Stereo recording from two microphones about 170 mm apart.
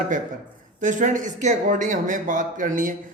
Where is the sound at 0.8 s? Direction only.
50° right (ahead or behind).